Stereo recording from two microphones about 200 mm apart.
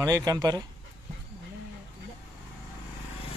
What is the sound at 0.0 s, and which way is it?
Speech, 15° right (ahead or behind).